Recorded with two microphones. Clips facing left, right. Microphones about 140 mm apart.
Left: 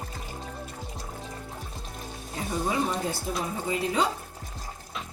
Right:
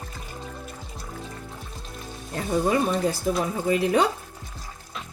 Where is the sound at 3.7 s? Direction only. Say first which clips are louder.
Right 6 dB; 65° right (ahead or behind).